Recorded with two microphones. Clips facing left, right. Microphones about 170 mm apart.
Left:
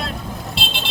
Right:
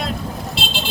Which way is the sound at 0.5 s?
Centre (ahead or behind).